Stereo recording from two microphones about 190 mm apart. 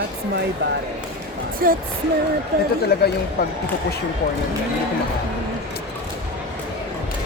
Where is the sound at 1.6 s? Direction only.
50° right (ahead or behind).